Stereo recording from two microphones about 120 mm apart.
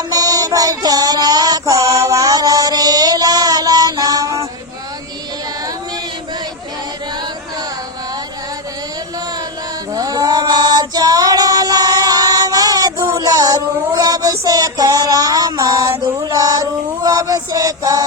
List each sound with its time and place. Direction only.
0.1 s music: 30° right (ahead or behind)
9.9 s female singing: 30° right (ahead or behind)